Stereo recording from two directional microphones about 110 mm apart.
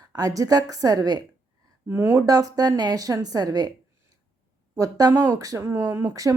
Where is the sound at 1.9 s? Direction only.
25° right (ahead or behind).